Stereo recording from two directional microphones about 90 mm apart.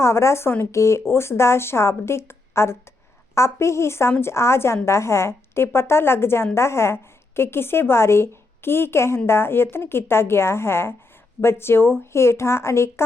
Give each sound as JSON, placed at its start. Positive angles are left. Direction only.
{"t": 0.0, "sound": "a woman's voice", "side_deg": 30}